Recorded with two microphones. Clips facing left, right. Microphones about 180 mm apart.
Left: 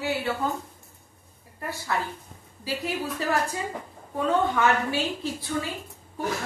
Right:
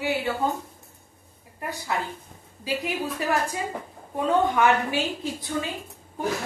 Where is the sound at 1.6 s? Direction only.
15° right (ahead or behind).